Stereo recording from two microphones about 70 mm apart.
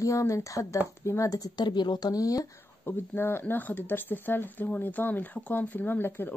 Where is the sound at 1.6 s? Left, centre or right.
Left.